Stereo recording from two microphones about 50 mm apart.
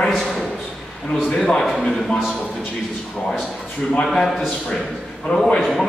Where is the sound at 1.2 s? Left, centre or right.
Centre.